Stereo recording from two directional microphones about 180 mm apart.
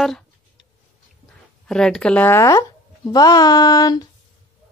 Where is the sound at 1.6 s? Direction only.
5° left (ahead or behind); by 4.0 s 20° left (ahead or behind).